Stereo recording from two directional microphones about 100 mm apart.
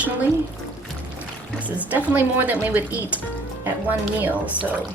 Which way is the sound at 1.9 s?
15° right (ahead or behind).